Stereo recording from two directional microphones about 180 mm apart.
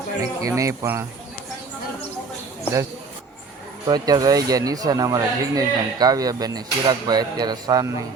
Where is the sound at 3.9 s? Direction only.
20° right (ahead or behind).